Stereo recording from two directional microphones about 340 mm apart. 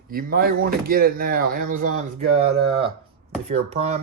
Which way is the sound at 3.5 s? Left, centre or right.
Centre.